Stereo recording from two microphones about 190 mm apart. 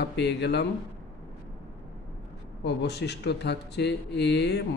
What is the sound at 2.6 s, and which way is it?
Speech, 65° left (ahead or behind).